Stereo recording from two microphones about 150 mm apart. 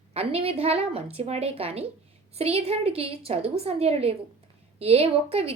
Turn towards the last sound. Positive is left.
turn(degrees=-40)  # may be behind; listen again after turning